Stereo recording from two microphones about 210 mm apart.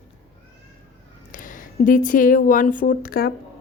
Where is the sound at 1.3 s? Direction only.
40° left (ahead or behind).